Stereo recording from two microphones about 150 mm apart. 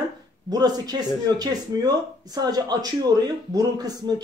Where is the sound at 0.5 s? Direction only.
25° right (ahead or behind).